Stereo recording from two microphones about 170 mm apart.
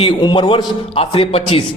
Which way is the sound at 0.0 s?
25° left (ahead or behind).